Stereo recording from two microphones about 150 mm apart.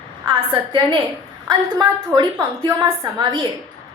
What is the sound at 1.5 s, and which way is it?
A woman's voice, 30° right (ahead or behind).